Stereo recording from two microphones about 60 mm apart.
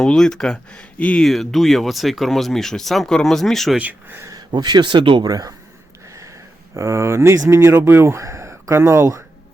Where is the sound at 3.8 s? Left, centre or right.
Right.